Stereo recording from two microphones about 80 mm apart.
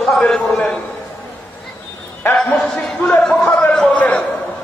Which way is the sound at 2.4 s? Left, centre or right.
Centre.